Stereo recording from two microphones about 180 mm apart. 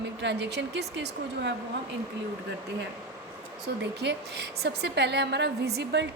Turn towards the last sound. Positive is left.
turn(degrees=-70)  # may be behind; listen again after turning